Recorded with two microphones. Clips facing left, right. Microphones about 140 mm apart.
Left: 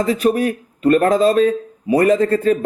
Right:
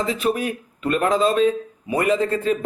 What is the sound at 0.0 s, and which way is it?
A man's voice, 45° left (ahead or behind).